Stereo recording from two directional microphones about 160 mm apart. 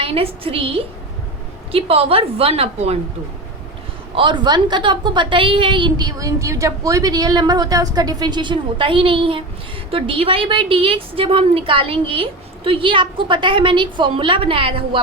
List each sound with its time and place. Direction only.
0.0 s a woman's voice: 35° right (ahead or behind)
4.1 s a woman's voice: 30° right (ahead or behind)